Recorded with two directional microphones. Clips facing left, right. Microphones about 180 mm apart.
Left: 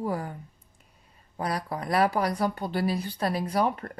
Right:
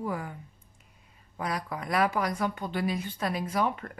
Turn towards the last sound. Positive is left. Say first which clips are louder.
# left 3 dB
turn(degrees=35)  # may be behind; listen again after turning